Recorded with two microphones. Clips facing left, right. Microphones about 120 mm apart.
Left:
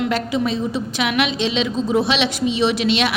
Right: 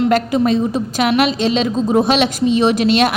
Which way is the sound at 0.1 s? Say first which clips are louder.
Right 6 dB; 50° right (ahead or behind).